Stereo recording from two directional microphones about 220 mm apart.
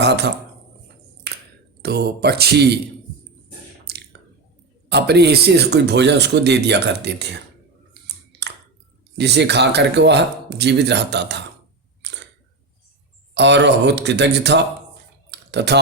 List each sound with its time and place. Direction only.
0.0 s speech: 50° right (ahead or behind)
1.8 s speech: 45° right (ahead or behind)
3.9 s a sound: 45° right (ahead or behind)
4.9 s speech: 50° right (ahead or behind)
8.0 s chewing: 50° right (ahead or behind)
9.1 s speech: 50° right (ahead or behind)
12.0 s a sound: 55° right (ahead or behind)
13.3 s speech: 50° right (ahead or behind)
15.3 s clicking: 50° right (ahead or behind)